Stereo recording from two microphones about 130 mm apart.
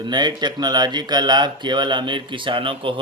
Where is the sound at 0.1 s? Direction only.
35° right (ahead or behind).